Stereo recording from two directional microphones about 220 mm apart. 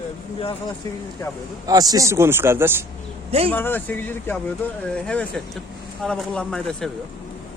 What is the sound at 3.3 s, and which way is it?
Speech, 25° right (ahead or behind).